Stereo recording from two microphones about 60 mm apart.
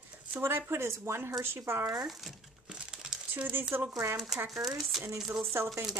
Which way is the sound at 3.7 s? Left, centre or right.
Right.